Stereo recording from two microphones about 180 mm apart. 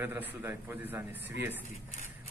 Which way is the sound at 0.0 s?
10° right (ahead or behind).